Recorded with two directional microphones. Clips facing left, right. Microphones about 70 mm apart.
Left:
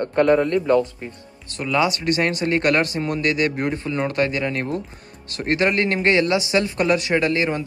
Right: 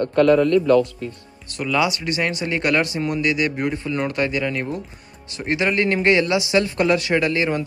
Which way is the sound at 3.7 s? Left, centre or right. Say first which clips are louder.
Left 1 dB; left.